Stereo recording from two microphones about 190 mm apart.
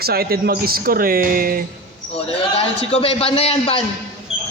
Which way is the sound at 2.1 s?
30° left (ahead or behind).